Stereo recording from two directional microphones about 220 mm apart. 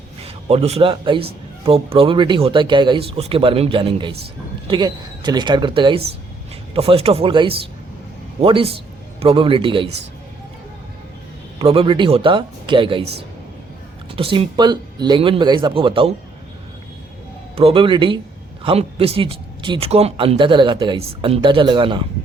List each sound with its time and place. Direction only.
0.2 s a man's voice: 25° right (ahead or behind)
11.6 s a man's voice: 25° right (ahead or behind)
14.2 s a man's voice: 25° right (ahead or behind)
17.5 s a man's voice: 25° right (ahead or behind)